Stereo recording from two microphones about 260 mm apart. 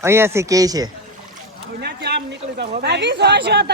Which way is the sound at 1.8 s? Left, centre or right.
Right.